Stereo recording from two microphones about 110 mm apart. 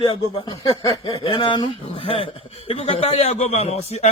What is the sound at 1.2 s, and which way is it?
A man's voice, 50° left (ahead or behind).